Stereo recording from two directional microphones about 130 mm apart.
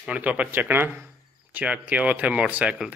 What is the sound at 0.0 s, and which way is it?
Speech, 10° right (ahead or behind).